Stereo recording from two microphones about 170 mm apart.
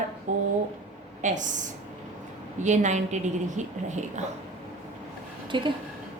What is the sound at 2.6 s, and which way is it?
A woman's voice, 45° right (ahead or behind).